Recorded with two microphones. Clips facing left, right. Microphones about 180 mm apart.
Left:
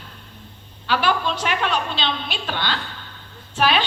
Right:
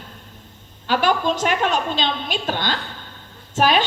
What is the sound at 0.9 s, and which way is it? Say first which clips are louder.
A woman's voice: right 2 dB; 45° right (ahead or behind).